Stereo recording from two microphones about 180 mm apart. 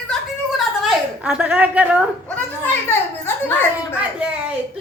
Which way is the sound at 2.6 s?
10° left (ahead or behind).